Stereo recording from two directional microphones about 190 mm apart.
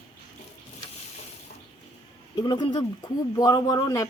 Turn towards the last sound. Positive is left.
turn(degrees=20)  # may be behind; listen again after turning